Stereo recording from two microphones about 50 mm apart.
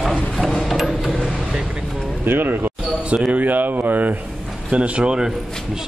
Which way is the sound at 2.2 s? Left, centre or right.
Right.